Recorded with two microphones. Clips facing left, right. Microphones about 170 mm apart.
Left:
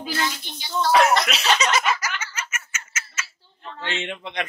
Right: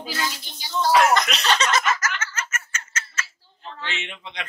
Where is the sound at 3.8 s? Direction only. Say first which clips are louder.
Left 6 dB; 55° left (ahead or behind).